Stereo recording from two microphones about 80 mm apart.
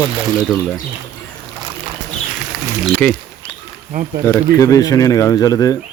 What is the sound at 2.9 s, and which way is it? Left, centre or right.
Speech, left.